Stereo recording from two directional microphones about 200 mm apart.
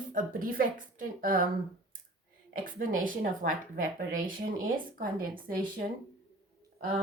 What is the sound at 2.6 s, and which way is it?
Speech, 45° right (ahead or behind).